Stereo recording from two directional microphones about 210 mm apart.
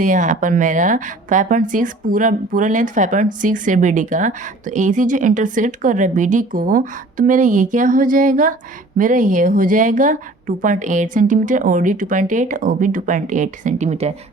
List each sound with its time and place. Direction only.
0.0 s a woman's voice: 35° right (ahead or behind)